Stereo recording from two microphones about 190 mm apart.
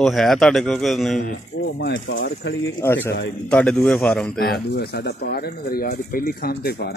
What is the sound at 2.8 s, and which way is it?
A man's voice, 10° left (ahead or behind).